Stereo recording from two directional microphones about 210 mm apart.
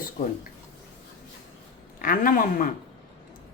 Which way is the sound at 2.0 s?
40° left (ahead or behind).